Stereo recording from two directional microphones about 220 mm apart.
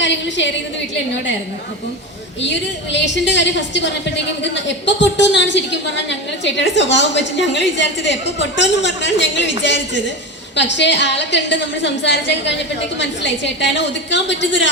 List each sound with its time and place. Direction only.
0.0 s a woman's voice: 55° left (ahead or behind)
2.9 s a woman's voice: 55° left (ahead or behind)